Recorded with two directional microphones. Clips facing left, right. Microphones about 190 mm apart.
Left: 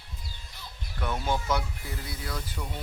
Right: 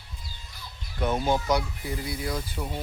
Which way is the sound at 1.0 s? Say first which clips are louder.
Right 5 dB; 20° right (ahead or behind).